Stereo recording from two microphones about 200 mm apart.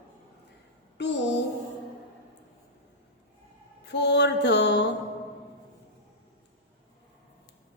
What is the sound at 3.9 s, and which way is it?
Mantra, 60° left (ahead or behind).